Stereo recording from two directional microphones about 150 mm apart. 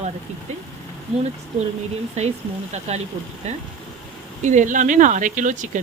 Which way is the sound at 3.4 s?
45° right (ahead or behind).